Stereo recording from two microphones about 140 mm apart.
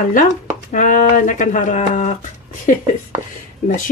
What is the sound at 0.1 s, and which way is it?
Speech, 65° left (ahead or behind).